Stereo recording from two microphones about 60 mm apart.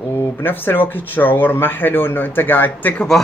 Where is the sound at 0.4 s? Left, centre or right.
Left.